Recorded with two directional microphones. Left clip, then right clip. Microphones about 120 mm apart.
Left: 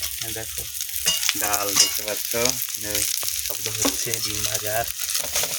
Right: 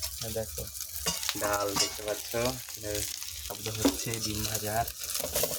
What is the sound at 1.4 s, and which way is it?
Frying, 40° left (ahead or behind).